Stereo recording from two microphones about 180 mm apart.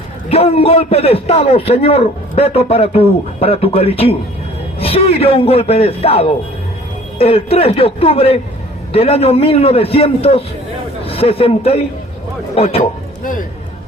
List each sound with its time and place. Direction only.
0.3 s a man's voice: 35° left (ahead or behind)